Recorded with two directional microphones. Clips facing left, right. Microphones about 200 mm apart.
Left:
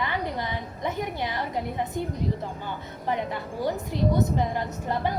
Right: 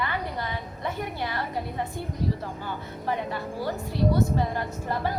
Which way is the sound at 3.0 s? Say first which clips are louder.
Left 1 dB; 20° left (ahead or behind).